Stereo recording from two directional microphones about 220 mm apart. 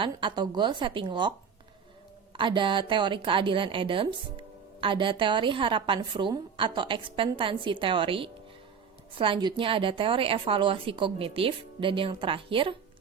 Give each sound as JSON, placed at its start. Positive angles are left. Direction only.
{"t": 0.0, "sound": "a woman's voice", "side_deg": -20}
{"t": 2.3, "sound": "a woman's voice", "side_deg": -20}